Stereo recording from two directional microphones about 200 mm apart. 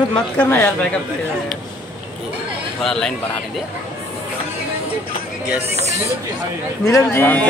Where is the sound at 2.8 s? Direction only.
5° left (ahead or behind).